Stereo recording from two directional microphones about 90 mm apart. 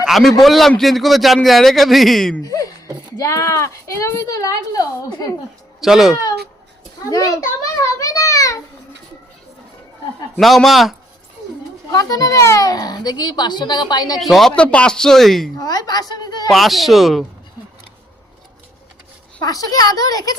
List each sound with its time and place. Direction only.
0.0 s a man's voice: centre (ahead or behind)
2.4 s a sound: 40° left (ahead or behind)
3.2 s a woman's voice: 40° left (ahead or behind)
5.8 s a man's voice: 5° right (ahead or behind)
7.1 s a sound: 40° left (ahead or behind)
10.4 s a man's voice: centre (ahead or behind)
11.9 s a child's voice: 40° left (ahead or behind)
14.2 s a man's voice: centre (ahead or behind)
14.5 s speech: 10° left (ahead or behind)
15.5 s a child's voice: 45° left (ahead or behind)
16.5 s a man's voice: centre (ahead or behind)
19.4 s a child's voice: 40° left (ahead or behind)